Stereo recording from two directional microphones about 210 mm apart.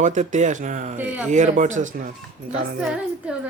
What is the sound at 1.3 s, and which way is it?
Speech, 35° right (ahead or behind).